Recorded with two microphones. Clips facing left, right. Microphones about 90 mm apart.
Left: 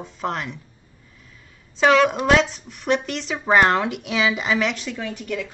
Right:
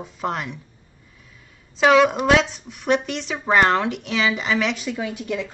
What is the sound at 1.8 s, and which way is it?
A woman's voice, centre (ahead or behind).